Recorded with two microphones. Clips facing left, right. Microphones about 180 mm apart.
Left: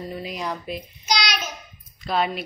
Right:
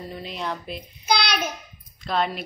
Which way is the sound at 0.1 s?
5° left (ahead or behind).